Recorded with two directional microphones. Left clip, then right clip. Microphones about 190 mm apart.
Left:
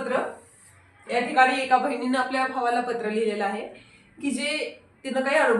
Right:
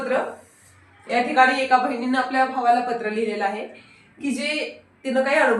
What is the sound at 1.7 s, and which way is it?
Speech, 30° left (ahead or behind).